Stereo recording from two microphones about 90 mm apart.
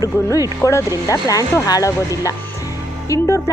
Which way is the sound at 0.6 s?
35° left (ahead or behind).